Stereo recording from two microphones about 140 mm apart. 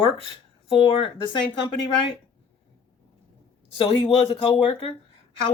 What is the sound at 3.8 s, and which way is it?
Speech, 40° left (ahead or behind).